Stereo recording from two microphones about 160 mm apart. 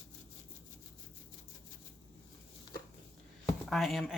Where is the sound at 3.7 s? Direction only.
Centre (ahead or behind).